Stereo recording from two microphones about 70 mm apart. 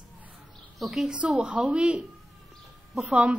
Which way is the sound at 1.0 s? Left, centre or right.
Centre.